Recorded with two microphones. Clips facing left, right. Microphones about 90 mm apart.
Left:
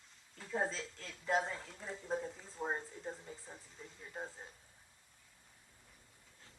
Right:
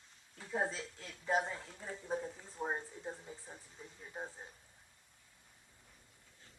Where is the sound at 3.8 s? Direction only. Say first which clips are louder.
Even; 15° right (ahead or behind).